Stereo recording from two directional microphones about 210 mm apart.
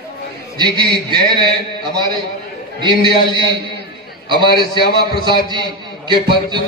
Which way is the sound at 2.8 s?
20° right (ahead or behind).